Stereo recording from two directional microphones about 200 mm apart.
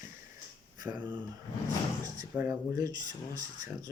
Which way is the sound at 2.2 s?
10° right (ahead or behind).